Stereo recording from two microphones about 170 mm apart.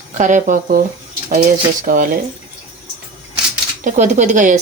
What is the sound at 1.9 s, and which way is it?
Speech, 55° right (ahead or behind).